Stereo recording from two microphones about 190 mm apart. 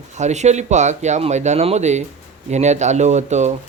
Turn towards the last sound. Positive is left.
turn(degrees=-35)  # may be behind; listen again after turning